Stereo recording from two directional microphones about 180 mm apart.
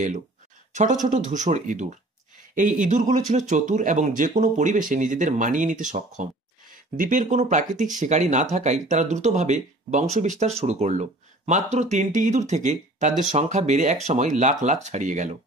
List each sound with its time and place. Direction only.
0.7 s speech: 45° right (ahead or behind)